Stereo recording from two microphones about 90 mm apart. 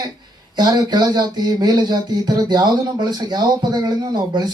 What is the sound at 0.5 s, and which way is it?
Speech, 50° right (ahead or behind).